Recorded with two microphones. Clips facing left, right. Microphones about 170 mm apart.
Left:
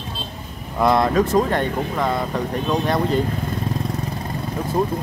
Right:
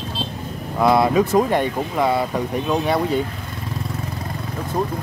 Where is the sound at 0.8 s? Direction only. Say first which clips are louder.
Right 1 dB; 5° right (ahead or behind).